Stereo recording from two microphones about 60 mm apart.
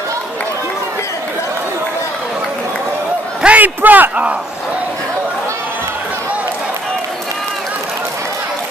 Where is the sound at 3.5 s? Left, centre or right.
Right.